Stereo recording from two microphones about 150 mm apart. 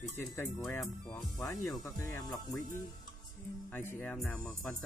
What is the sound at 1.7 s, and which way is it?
Speech, 20° left (ahead or behind).